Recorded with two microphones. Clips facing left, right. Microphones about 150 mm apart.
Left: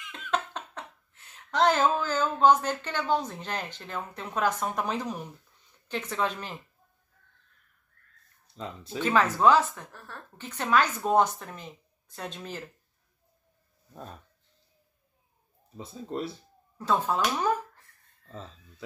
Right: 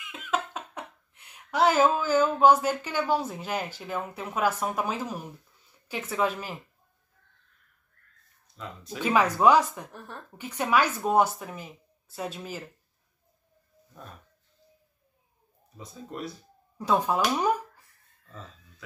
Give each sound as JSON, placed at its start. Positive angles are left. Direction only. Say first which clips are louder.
{"t": 0.1, "sound": "speech", "louder": "right 1 dB", "side_deg": -5}
{"t": 9.0, "sound": "speech", "louder": "right 1 dB", "side_deg": -10}
{"t": 15.8, "sound": "speech", "louder": "left 3 dB", "side_deg": 30}
{"t": 16.7, "sound": "speech", "louder": "right 2 dB", "side_deg": -15}